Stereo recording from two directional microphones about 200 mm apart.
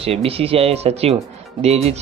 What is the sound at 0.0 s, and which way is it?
Speech, 30° right (ahead or behind).